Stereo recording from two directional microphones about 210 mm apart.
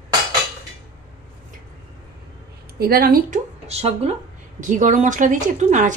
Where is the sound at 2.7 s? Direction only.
45° right (ahead or behind).